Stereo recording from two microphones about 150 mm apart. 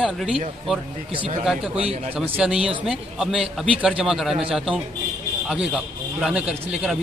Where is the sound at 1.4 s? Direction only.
Centre (ahead or behind).